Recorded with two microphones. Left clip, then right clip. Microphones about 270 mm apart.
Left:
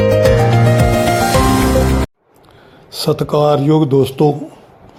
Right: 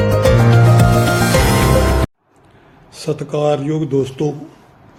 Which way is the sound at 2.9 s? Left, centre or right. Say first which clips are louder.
Left 6 dB; left.